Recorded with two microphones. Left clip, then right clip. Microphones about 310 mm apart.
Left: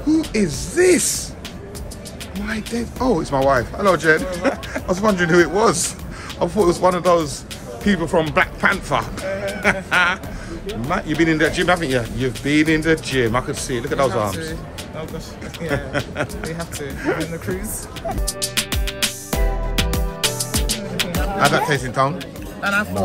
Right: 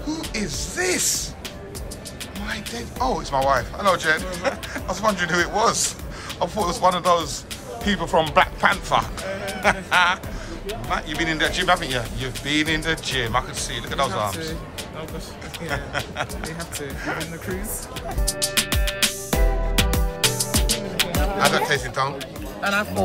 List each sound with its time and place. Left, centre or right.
0.0 s speech: centre
2.4 s speech: centre
15.7 s speech: centre
18.2 s music: centre